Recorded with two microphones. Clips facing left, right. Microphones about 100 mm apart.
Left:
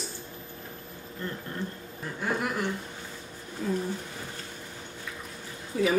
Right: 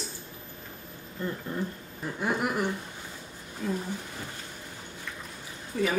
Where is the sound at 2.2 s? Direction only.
15° right (ahead or behind).